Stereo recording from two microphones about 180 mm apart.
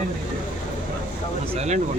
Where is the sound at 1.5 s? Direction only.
40° right (ahead or behind).